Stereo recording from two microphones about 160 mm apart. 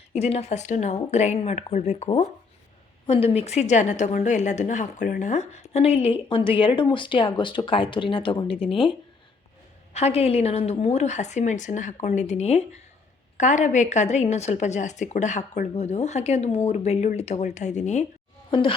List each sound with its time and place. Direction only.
0.1 s a woman's voice: 40° left (ahead or behind)
9.9 s a woman's voice: 40° left (ahead or behind)